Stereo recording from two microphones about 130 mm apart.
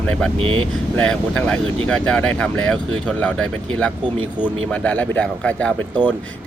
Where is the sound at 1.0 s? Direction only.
10° left (ahead or behind).